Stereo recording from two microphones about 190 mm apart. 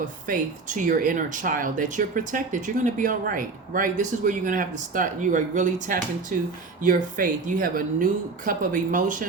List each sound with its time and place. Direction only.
0.3 s speech: 45° right (ahead or behind)